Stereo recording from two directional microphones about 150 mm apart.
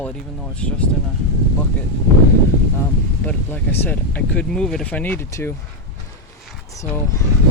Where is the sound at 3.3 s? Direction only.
10° left (ahead or behind).